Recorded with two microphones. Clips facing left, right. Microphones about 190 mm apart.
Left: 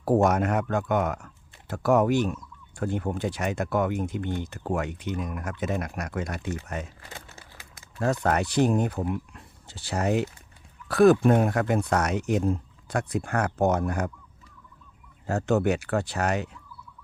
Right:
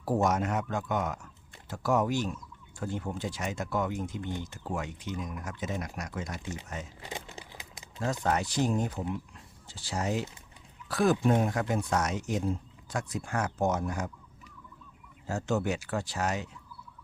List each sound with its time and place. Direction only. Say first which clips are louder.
0.0 s speech: left 6 dB; 60° left (ahead or behind)
7.0 s crumpling: right 4 dB; 20° right (ahead or behind)
7.9 s speech: left 5 dB; 60° left (ahead or behind)
15.3 s speech: left 6 dB; 60° left (ahead or behind)